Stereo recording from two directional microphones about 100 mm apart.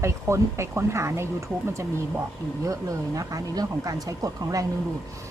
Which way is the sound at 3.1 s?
35° right (ahead or behind).